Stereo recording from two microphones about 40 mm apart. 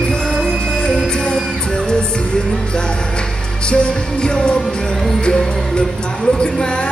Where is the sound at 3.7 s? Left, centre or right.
Left.